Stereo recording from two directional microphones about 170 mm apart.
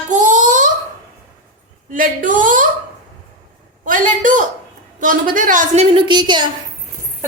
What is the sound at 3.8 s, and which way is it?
A child's voice, 50° right (ahead or behind).